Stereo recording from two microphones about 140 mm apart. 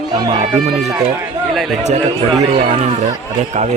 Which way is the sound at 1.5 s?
Centre (ahead or behind).